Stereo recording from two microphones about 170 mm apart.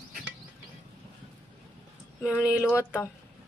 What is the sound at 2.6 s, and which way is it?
Speech, 15° left (ahead or behind).